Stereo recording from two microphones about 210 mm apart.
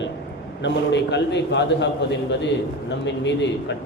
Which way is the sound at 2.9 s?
55° left (ahead or behind).